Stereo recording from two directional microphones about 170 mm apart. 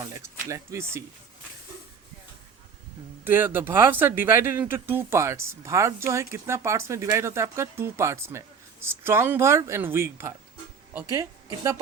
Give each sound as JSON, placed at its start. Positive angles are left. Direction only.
{"t": 0.0, "sound": "speech", "side_deg": -20}
{"t": 3.2, "sound": "a woman's voice", "side_deg": -10}